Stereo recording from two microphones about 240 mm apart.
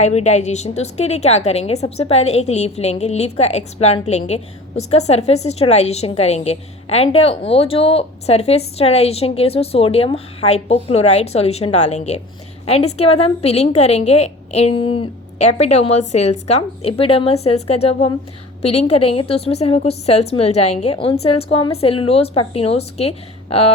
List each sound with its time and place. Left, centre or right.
0.0 s a woman's voice: left